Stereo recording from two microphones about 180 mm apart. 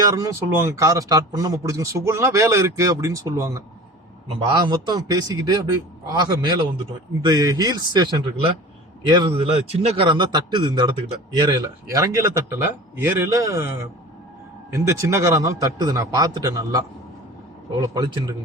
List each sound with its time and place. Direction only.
0.0 s a man's voice: 15° right (ahead or behind)
14.7 s a man's voice: 15° right (ahead or behind)